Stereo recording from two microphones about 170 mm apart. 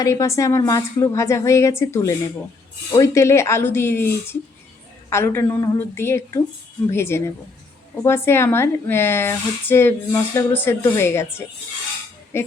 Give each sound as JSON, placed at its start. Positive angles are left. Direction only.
{"t": 0.0, "sound": "speech", "side_deg": 20}